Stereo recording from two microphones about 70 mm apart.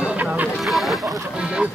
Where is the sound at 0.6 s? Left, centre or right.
Centre.